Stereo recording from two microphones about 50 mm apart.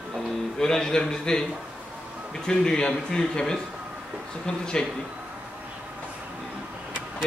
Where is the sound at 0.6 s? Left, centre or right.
Centre.